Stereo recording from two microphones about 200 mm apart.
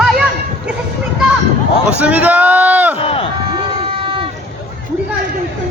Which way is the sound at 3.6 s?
25° right (ahead or behind).